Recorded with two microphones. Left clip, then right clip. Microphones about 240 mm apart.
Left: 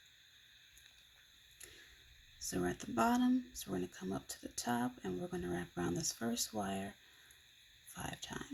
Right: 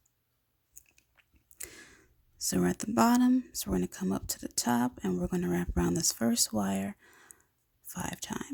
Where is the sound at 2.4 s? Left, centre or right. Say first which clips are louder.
Right 8 dB; right.